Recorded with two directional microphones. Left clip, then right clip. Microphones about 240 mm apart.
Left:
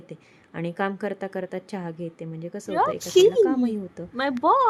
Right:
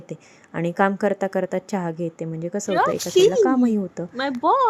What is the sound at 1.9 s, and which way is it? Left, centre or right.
A woman's voice, centre.